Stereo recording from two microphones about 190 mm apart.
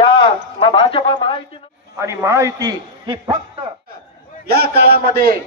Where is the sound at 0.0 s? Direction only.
25° left (ahead or behind).